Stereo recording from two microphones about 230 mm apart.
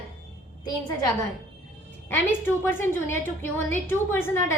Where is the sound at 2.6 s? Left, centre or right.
Centre.